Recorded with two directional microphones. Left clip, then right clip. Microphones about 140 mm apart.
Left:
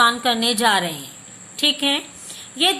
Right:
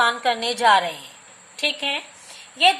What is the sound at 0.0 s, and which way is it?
A woman's voice, 15° right (ahead or behind).